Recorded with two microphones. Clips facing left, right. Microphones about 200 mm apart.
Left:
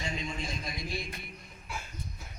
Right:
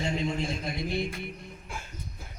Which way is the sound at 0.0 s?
65° right (ahead or behind).